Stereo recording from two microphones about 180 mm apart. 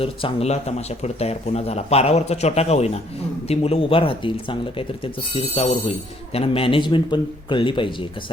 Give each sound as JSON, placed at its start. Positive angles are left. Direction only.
{"t": 0.0, "sound": "speech", "side_deg": 30}